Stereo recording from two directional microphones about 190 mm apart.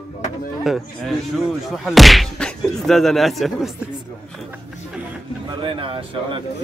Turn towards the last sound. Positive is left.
turn(degrees=-30)  # may be behind; listen again after turning